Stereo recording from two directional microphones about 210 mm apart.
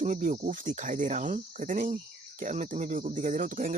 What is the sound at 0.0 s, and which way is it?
Speech, 35° right (ahead or behind).